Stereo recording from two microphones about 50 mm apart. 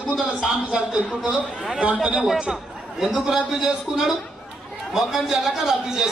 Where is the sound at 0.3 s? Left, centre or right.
Centre.